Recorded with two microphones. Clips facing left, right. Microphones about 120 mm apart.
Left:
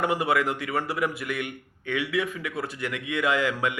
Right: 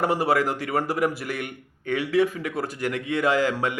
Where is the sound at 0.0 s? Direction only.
40° right (ahead or behind).